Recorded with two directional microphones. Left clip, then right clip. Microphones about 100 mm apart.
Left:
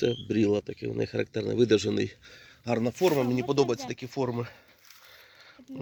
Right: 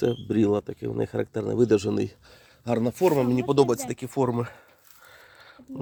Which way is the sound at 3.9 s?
30° right (ahead or behind).